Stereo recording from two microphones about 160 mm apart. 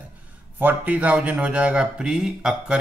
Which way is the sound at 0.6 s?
10° right (ahead or behind).